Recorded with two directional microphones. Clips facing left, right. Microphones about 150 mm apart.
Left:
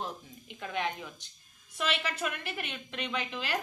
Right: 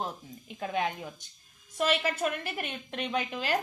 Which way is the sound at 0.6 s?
40° right (ahead or behind).